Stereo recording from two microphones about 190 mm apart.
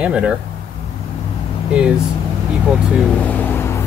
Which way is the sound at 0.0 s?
5° right (ahead or behind).